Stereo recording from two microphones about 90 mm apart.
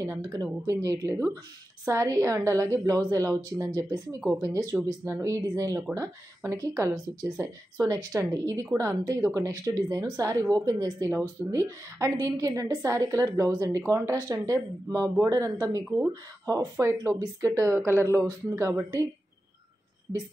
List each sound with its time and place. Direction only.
0.0 s a woman's voice: 30° right (ahead or behind)
4.7 s a woman's voice: 30° right (ahead or behind)